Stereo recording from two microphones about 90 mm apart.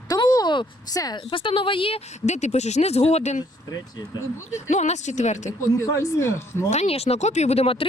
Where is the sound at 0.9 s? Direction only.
40° left (ahead or behind).